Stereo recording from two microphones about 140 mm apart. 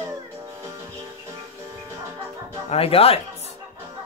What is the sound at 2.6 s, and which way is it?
Speech, 45° left (ahead or behind).